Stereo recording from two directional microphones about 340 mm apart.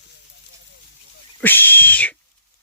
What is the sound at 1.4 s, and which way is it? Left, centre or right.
Dog, centre.